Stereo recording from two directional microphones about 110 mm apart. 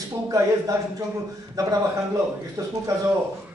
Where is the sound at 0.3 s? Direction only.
35° right (ahead or behind).